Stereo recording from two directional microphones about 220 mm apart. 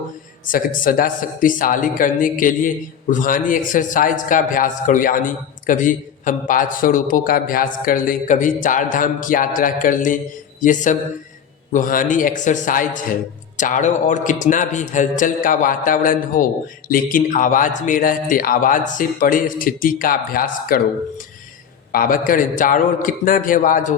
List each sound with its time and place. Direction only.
0.4 s speech: 40° left (ahead or behind)
21.9 s speech: 40° left (ahead or behind)